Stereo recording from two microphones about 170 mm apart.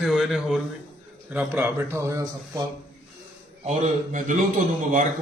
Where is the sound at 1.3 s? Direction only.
15° right (ahead or behind).